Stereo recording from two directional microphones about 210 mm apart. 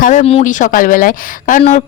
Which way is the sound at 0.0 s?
35° left (ahead or behind).